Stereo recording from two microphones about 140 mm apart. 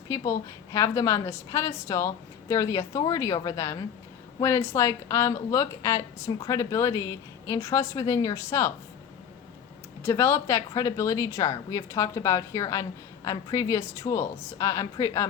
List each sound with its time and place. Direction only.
0.1 s a woman's voice: 20° left (ahead or behind)
10.0 s a woman's voice: 20° left (ahead or behind)